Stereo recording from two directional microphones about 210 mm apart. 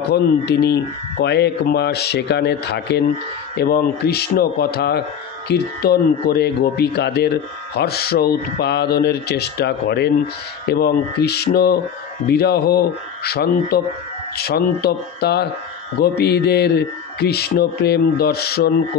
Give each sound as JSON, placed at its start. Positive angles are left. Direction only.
{"t": 0.1, "sound": "speech", "side_deg": 50}